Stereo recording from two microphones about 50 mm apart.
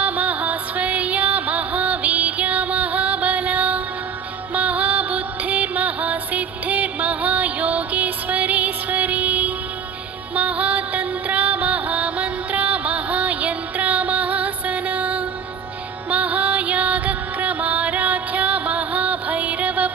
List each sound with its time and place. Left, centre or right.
0.0 s music: right